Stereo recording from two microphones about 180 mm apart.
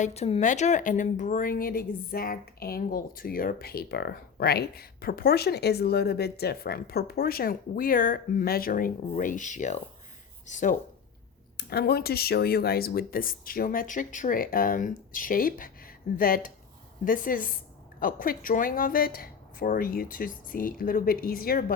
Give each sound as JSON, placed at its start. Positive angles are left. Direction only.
{"t": 0.0, "sound": "speech", "side_deg": 35}
{"t": 11.5, "sound": "speech", "side_deg": 60}